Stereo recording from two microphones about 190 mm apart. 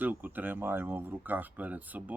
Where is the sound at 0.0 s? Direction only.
10° right (ahead or behind).